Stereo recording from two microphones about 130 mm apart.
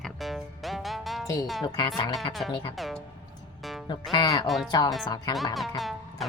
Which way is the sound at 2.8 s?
Centre (ahead or behind).